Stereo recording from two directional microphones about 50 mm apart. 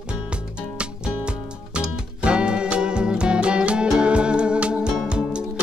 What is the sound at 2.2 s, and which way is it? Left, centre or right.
Music, centre.